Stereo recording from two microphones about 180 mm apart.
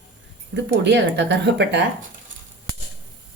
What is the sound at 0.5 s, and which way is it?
Speech, 70° right (ahead or behind).